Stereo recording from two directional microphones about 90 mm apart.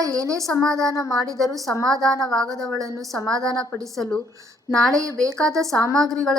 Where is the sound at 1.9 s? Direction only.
5° left (ahead or behind).